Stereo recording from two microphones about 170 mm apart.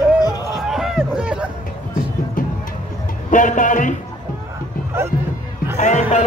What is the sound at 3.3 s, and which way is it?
Music, 50° left (ahead or behind).